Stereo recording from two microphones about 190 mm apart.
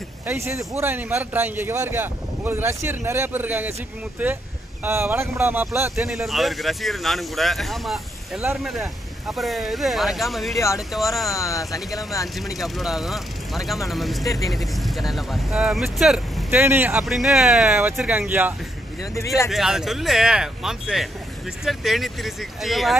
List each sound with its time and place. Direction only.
0.3 s speech: 15° right (ahead or behind)
5.9 s speech: centre (ahead or behind)
11.3 s speech: 15° left (ahead or behind)
12.5 s speech: centre (ahead or behind)
19.1 s speech: 15° left (ahead or behind)
19.5 s speech: centre (ahead or behind)